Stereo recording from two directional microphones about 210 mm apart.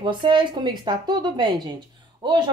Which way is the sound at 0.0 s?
25° right (ahead or behind).